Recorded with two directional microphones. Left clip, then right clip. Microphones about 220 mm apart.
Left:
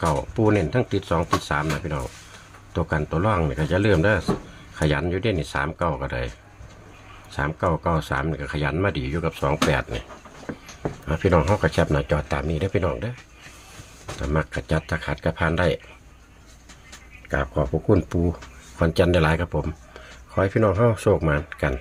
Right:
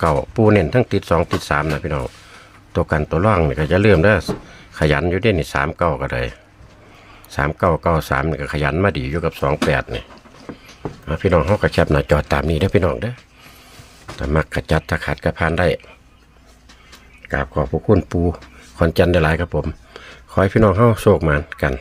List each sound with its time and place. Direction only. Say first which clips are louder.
0.0 s speech: right 6 dB; 30° right (ahead or behind)
11.0 s speech: right 4 dB; 15° right (ahead or behind)
14.2 s speech: right 6 dB; 30° right (ahead or behind)
17.3 s speech: right 4 dB; 25° right (ahead or behind)